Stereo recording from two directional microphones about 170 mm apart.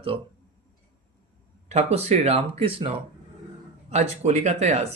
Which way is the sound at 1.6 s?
40° right (ahead or behind).